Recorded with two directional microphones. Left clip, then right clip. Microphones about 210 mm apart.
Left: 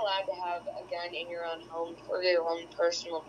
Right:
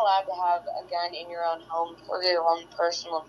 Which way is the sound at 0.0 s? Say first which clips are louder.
Right 8 dB; 20° right (ahead or behind).